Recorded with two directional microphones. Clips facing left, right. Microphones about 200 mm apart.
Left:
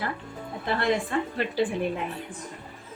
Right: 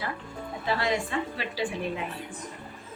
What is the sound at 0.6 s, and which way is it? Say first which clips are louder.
Speech: left 3 dB; 55° left (ahead or behind).